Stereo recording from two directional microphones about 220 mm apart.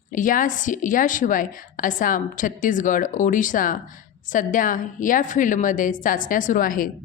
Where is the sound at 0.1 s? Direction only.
35° left (ahead or behind).